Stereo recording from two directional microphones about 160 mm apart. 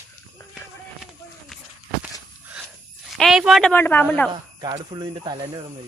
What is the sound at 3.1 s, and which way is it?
Speech, centre (ahead or behind).